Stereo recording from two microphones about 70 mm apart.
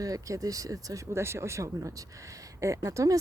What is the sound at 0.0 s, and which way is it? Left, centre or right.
Speech, right.